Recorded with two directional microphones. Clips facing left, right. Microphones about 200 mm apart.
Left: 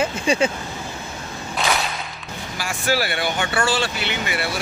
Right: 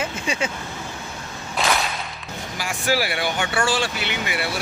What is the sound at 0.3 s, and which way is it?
Speech, 30° left (ahead or behind).